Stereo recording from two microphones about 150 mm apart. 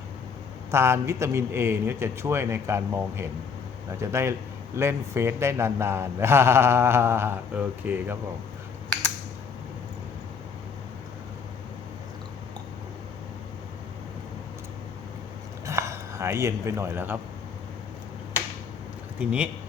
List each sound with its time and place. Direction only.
0.7 s speech: 20° right (ahead or behind)
15.6 s a sound: 20° right (ahead or behind)
19.2 s speech: 10° right (ahead or behind)